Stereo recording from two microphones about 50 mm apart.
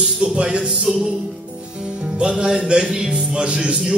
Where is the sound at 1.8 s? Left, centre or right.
Centre.